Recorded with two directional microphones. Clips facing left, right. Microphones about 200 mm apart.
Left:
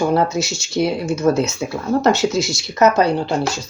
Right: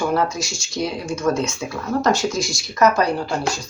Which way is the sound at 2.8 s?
25° left (ahead or behind).